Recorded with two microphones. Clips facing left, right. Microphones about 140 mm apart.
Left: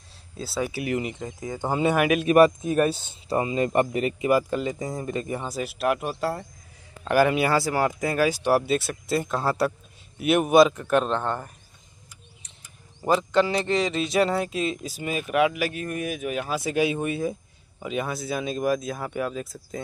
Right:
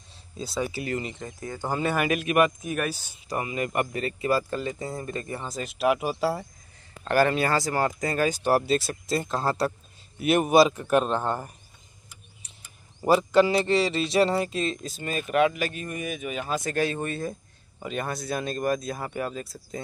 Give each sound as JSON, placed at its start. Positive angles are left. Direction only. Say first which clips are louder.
{"t": 0.4, "sound": "speech", "louder": "left 1 dB", "side_deg": 5}
{"t": 2.2, "sound": "speech", "louder": "left 8 dB", "side_deg": 35}
{"t": 7.1, "sound": "speech", "louder": "left 2 dB", "side_deg": 10}
{"t": 8.7, "sound": "speech", "louder": "even", "side_deg": 60}
{"t": 9.1, "sound": "speech", "louder": "left 2 dB", "side_deg": 0}
{"t": 13.0, "sound": "speech", "louder": "right 2 dB", "side_deg": -10}